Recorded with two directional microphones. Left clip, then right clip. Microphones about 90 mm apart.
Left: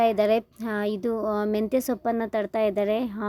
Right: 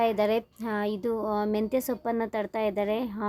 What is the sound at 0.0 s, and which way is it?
A woman's voice, 30° left (ahead or behind).